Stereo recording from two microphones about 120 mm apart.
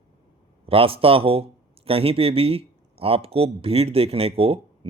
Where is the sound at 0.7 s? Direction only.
50° right (ahead or behind).